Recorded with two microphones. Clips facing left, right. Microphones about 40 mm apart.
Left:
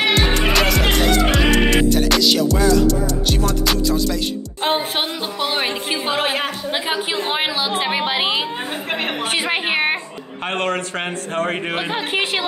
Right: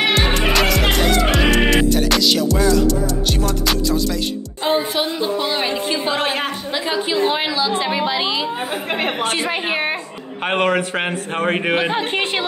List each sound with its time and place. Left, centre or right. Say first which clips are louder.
0.0 s music: even; centre
4.6 s speech: right 2 dB; left
6.1 s speech: even; centre
6.9 s a woman's voice: right 5 dB; left
9.5 s speech: left 2 dB; left
10.5 s a man's voice: right 4 dB; centre
11.9 s speech: right 1 dB; centre